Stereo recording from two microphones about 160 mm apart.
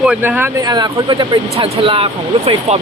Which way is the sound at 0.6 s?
25° right (ahead or behind).